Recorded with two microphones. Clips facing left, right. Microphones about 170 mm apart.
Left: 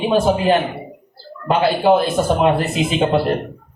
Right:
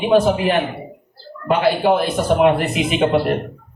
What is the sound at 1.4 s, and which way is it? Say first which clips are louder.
A man's voice: left 1 dB; 30° left (ahead or behind).